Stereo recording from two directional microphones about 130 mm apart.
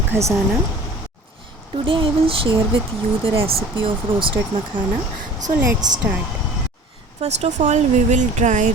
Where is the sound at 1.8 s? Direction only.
40° right (ahead or behind).